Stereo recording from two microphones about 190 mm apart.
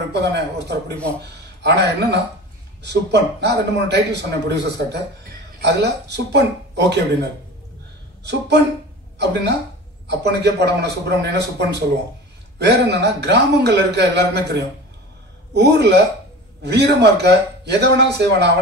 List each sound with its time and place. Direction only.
0.1 s a man's voice: 60° right (ahead or behind)